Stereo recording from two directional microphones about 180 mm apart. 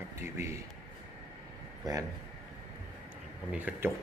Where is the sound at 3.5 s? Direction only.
10° right (ahead or behind).